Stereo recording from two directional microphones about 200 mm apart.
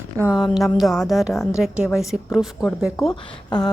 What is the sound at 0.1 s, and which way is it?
Speech, 15° right (ahead or behind).